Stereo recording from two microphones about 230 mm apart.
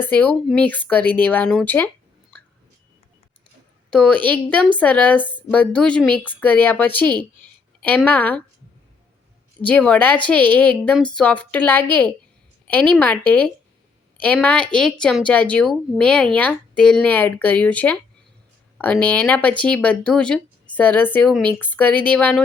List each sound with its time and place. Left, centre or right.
0.0 s speech: centre
3.8 s speech: centre
5.2 s speech: centre
5.5 s speech: centre
9.6 s speech: centre